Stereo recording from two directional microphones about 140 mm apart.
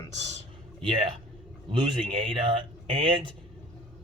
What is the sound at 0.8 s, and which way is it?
Speech, 35° right (ahead or behind).